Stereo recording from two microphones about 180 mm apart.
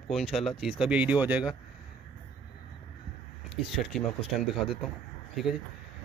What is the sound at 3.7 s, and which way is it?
Speech, centre (ahead or behind).